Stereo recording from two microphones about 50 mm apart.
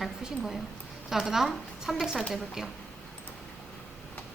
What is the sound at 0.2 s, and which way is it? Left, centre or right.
A woman's voice, centre.